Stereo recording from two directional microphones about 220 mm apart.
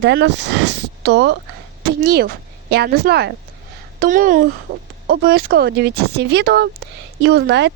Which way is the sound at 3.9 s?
35° right (ahead or behind).